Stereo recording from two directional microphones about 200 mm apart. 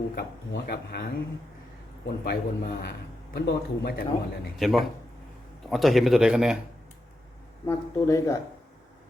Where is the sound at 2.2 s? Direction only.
55° left (ahead or behind).